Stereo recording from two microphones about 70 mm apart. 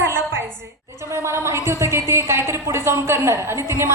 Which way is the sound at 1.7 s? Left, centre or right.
Right.